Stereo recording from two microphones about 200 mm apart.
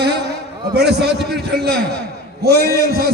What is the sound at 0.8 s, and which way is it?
A man's voice, 55° right (ahead or behind).